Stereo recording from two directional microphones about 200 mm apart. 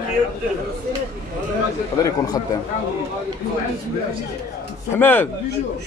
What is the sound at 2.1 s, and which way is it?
Speech, 20° left (ahead or behind).